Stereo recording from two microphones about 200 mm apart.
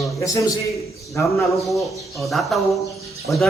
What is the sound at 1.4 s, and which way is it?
Speech, centre (ahead or behind).